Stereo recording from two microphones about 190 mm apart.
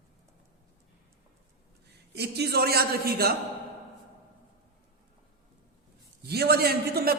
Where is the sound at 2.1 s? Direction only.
60° right (ahead or behind).